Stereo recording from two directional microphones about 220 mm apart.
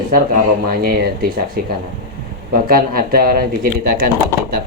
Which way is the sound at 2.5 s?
40° right (ahead or behind).